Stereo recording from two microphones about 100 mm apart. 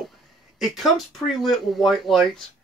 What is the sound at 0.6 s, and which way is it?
Speech, centre (ahead or behind).